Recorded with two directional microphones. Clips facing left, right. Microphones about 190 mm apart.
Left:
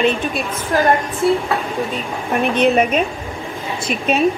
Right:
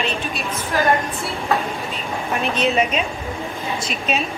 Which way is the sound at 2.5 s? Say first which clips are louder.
Left 5 dB; 55° left (ahead or behind).